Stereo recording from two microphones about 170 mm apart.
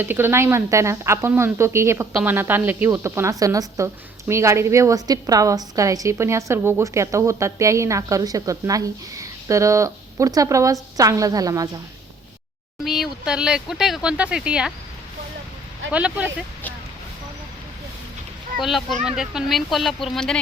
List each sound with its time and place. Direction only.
0.0 s speech: 15° right (ahead or behind)
12.8 s speech: centre (ahead or behind)
15.9 s speech: 5° right (ahead or behind)
18.6 s speech: centre (ahead or behind)